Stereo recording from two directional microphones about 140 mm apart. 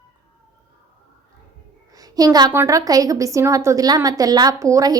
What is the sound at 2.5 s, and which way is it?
A woman's voice, 20° right (ahead or behind).